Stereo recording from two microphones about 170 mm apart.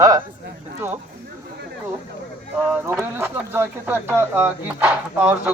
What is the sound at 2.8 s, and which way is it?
Speech, 15° right (ahead or behind).